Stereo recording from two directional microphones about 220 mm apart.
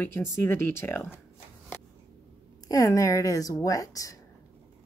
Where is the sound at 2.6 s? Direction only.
15° left (ahead or behind).